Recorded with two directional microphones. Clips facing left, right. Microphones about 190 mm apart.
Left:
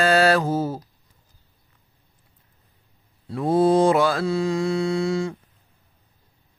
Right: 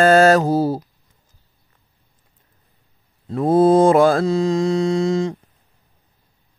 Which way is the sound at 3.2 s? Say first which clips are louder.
Right 5 dB; 45° right (ahead or behind).